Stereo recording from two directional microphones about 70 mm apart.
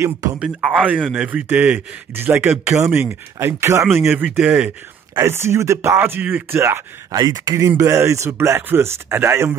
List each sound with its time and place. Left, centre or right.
0.4 s speech: centre; by 4.2 s right
4.2 s speech: right
5.2 s speech: right
5.8 s speech: right
7.1 s speech: right
7.5 s speech: right